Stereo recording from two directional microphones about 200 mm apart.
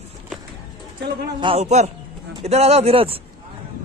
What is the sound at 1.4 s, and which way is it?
A man's voice, 30° right (ahead or behind).